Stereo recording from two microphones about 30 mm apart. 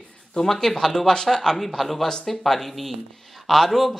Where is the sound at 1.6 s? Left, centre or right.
Centre.